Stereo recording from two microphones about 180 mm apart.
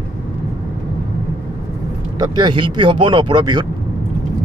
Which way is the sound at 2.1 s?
25° right (ahead or behind).